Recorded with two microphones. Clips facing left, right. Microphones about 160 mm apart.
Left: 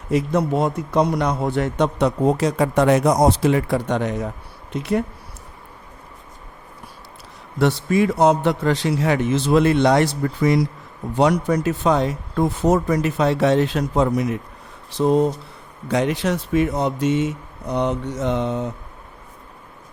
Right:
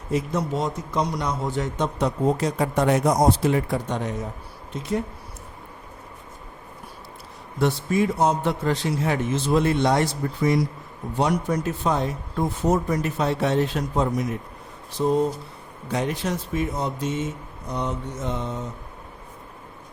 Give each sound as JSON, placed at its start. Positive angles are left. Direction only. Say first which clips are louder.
{"t": 0.1, "sound": "a man's voice", "louder": "left 5 dB", "side_deg": 65}
{"t": 7.6, "sound": "a man's voice", "louder": "left 4 dB", "side_deg": 80}
{"t": 15.9, "sound": "a man's voice", "louder": "left 5 dB", "side_deg": 90}